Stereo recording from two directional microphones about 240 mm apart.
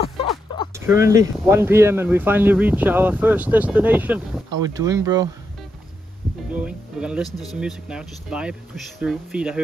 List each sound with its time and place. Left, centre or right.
0.0 s a sound: left
0.7 s speech: centre
6.5 s speech: centre